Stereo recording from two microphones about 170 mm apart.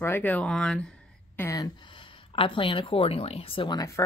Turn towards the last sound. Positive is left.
turn(degrees=20)  # may be behind; listen again after turning